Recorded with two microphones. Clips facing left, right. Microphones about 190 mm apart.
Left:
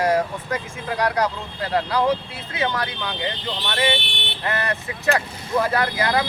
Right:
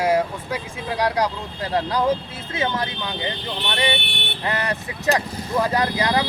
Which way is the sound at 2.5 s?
20° right (ahead or behind).